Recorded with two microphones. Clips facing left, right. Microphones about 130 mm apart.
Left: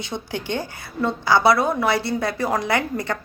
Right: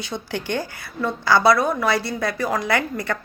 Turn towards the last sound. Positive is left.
turn(degrees=20)  # may be behind; listen again after turning